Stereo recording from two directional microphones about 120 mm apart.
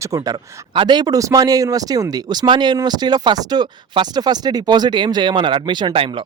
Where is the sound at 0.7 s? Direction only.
40° right (ahead or behind).